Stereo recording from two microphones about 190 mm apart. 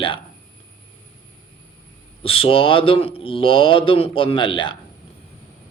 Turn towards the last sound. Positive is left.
turn(degrees=25)  # may be behind; listen again after turning